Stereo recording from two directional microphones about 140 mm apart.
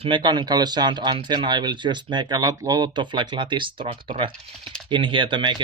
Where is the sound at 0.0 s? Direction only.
35° right (ahead or behind).